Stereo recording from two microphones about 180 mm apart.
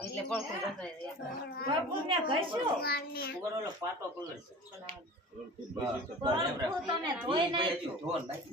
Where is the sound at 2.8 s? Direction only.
60° left (ahead or behind).